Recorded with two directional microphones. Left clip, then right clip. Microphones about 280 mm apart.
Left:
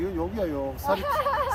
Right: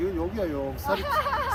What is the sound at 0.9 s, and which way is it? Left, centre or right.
Speech, left.